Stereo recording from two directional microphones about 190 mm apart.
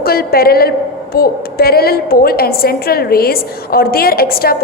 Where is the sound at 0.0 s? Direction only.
55° left (ahead or behind).